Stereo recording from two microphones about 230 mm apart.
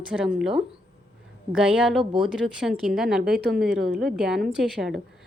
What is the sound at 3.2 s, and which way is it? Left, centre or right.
Speech, right.